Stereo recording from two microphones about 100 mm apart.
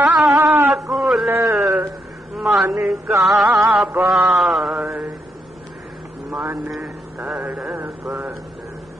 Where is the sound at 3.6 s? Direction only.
5° right (ahead or behind).